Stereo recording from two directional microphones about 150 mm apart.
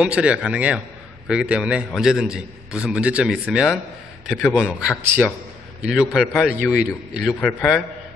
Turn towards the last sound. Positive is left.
turn(degrees=5)  # may be behind; listen again after turning